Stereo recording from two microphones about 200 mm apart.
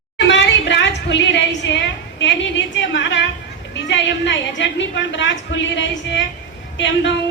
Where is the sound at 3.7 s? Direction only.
65° left (ahead or behind).